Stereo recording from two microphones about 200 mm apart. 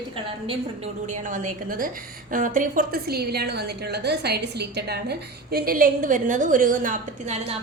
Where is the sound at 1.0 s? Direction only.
40° right (ahead or behind).